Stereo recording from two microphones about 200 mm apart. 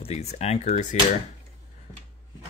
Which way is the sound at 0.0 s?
35° left (ahead or behind).